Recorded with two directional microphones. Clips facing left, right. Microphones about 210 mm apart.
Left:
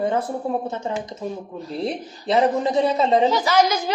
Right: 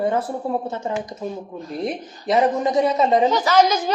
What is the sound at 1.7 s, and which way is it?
A woman's voice, 30° left (ahead or behind).